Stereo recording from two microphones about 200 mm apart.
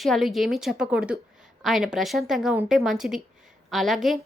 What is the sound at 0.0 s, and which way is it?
A woman's voice, centre (ahead or behind).